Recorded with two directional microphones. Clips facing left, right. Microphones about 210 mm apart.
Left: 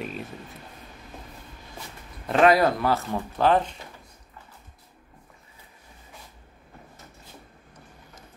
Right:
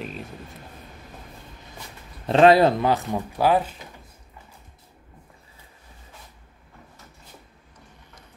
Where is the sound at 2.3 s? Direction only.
25° right (ahead or behind); by 3.8 s 5° right (ahead or behind).